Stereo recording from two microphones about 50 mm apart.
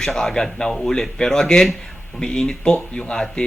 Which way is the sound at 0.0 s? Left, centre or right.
Centre.